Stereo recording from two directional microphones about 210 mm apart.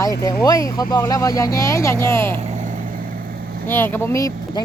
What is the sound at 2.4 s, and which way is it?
Vehicle, 35° right (ahead or behind).